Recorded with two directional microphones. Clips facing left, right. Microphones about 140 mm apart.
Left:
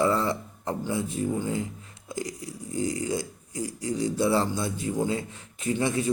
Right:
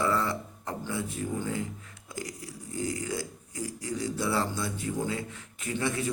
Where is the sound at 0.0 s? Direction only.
25° left (ahead or behind).